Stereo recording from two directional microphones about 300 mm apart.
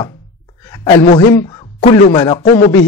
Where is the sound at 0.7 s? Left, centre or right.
Centre.